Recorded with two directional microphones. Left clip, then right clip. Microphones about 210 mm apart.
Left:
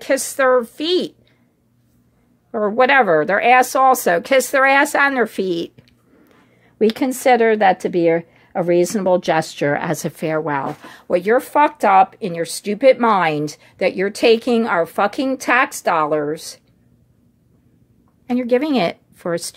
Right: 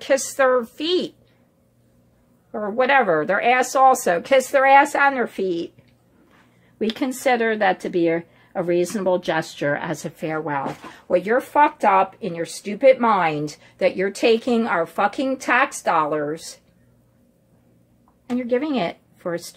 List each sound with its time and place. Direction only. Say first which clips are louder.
0.0 s a woman's voice: left 2 dB; 30° left (ahead or behind)
2.5 s a woman's voice: left 4 dB; 40° left (ahead or behind)
6.8 s a woman's voice: left 6 dB; 35° left (ahead or behind)
18.3 s a woman's voice: left 5 dB; 40° left (ahead or behind)